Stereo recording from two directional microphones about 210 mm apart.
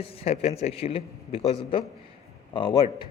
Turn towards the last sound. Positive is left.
turn(degrees=20)  # may be behind; listen again after turning